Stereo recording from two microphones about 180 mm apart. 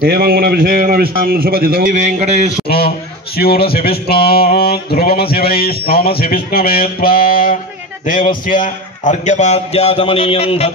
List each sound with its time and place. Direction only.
0.0 s a man's voice: 55° right (ahead or behind); by 2.5 s 35° right (ahead or behind)
3.3 s a sound: 60° left (ahead or behind)
8.0 s a man's voice: 50° left (ahead or behind)